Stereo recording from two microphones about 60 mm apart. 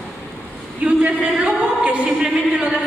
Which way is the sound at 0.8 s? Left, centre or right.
Right.